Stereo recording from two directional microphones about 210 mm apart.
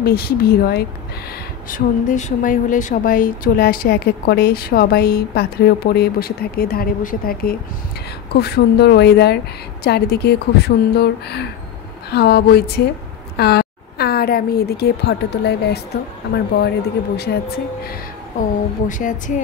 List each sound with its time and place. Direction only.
0.0 s a woman's voice: 45° left (ahead or behind)
1.7 s a woman's voice: 35° left (ahead or behind)
18.9 s speech: 40° left (ahead or behind)